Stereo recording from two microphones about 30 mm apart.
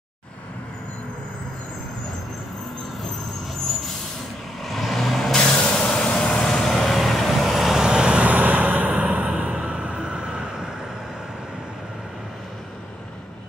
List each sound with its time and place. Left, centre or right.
4.6 s vehicle: centre
5.1 s vehicle: centre
6.6 s vehicle: centre
7.8 s vehicle: right
8.3 s vehicle: right
9.4 s music: right
10.1 s vehicle: right